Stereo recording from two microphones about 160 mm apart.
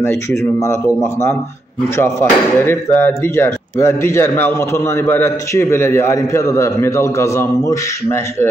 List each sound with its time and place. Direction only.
0.0 s speech: 15° left (ahead or behind)